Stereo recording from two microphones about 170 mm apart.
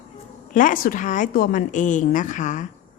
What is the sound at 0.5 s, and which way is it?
A woman's voice, 50° left (ahead or behind).